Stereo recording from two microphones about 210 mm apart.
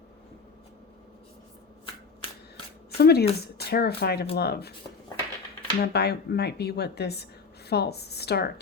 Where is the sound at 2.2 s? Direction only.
25° left (ahead or behind).